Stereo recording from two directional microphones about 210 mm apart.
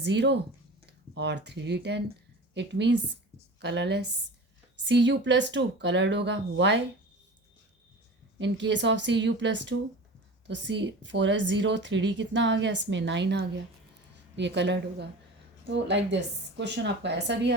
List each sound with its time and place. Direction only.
0.0 s speech: 55° right (ahead or behind)
8.4 s speech: 60° right (ahead or behind)